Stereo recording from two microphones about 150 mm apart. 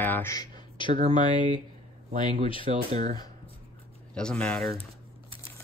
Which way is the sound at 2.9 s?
45° right (ahead or behind).